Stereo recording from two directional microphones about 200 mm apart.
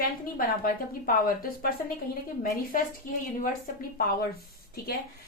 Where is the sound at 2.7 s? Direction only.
40° left (ahead or behind).